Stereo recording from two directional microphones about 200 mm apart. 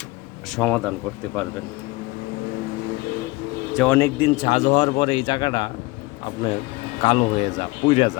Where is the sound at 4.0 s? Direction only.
25° left (ahead or behind).